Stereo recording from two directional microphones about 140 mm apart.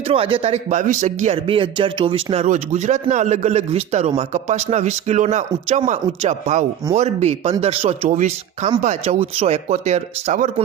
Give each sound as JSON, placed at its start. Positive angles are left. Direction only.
{"t": 0.1, "sound": "a man's voice", "side_deg": -40}
{"t": 0.8, "sound": "a man's voice", "side_deg": -60}
{"t": 8.1, "sound": "speech", "side_deg": -60}